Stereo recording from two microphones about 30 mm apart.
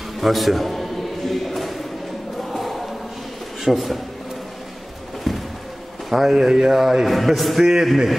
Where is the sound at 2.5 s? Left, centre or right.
Centre.